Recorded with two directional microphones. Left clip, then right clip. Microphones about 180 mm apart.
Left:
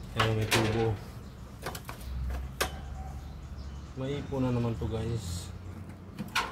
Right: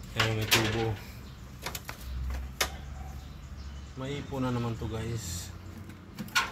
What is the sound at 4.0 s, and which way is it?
Speech, centre (ahead or behind).